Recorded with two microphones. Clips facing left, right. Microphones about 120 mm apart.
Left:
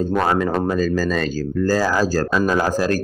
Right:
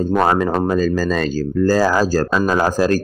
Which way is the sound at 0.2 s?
30° right (ahead or behind).